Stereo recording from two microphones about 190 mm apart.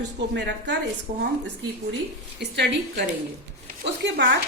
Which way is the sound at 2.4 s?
65° right (ahead or behind).